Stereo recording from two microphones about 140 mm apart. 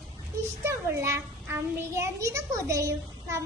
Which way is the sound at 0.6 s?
20° right (ahead or behind).